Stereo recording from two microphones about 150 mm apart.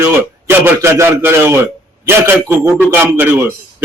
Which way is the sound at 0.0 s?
15° right (ahead or behind).